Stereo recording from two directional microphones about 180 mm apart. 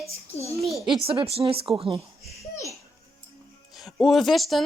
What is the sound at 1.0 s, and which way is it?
Speech, 30° right (ahead or behind).